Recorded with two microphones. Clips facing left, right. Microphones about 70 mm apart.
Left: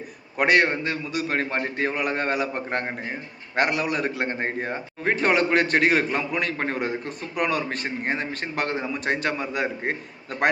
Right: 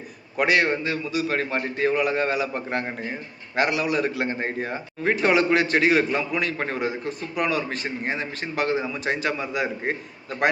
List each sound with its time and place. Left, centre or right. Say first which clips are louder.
0.3 s a man's voice: left 1 dB; left
2.0 s a man's voice: right 2 dB; left
2.6 s a man's voice: even; left
3.5 s a man's voice: right 1 dB; left